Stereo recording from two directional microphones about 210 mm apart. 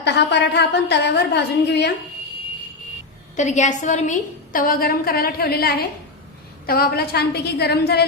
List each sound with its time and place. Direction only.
0.0 s a woman's voice: 55° left (ahead or behind)
3.3 s a woman's voice: 35° left (ahead or behind); by 8.0 s 50° left (ahead or behind)